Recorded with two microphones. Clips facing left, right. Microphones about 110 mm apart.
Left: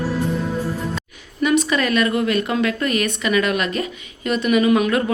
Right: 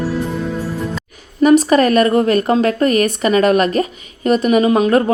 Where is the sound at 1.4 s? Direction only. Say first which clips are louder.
Right 8 dB; 40° right (ahead or behind).